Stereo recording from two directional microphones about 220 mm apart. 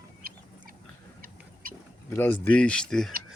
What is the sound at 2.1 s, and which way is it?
Speech, 10° left (ahead or behind).